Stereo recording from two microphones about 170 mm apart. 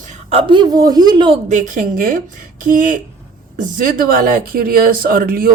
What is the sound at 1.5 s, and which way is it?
Speech, 50° right (ahead or behind).